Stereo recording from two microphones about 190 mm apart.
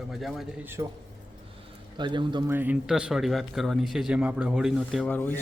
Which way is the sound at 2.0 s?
25° right (ahead or behind).